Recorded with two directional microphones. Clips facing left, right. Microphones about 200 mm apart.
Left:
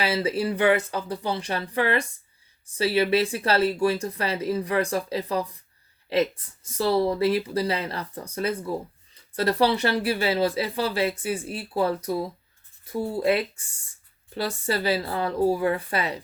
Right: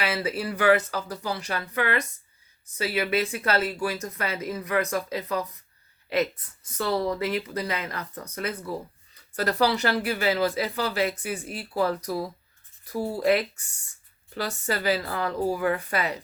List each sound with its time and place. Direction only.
0.0 s speech: 30° left (ahead or behind)